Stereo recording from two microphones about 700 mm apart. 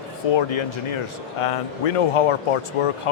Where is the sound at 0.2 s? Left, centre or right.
Left.